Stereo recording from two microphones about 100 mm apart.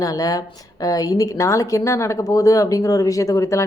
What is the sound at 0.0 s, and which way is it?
A woman's voice, 35° left (ahead or behind).